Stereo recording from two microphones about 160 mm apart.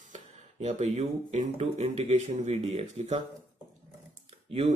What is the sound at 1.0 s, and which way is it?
Speech, 40° right (ahead or behind).